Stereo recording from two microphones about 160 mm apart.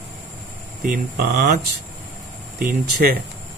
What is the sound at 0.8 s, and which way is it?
Speech, 70° right (ahead or behind).